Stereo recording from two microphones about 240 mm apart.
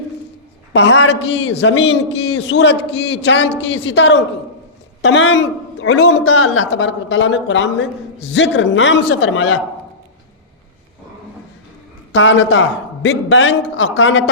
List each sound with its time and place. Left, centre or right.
0.7 s a man's voice: left
12.1 s a man's voice: left